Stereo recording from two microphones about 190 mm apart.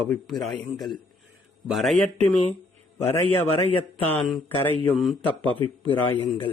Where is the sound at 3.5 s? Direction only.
30° left (ahead or behind).